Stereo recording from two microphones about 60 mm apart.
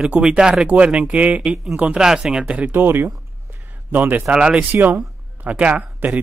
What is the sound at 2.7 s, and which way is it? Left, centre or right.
Speech, right.